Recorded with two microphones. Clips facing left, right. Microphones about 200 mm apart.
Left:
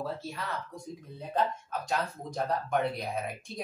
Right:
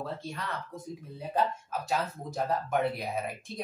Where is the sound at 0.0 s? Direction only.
5° left (ahead or behind).